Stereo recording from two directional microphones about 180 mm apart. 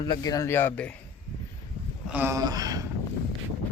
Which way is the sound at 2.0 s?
10° right (ahead or behind).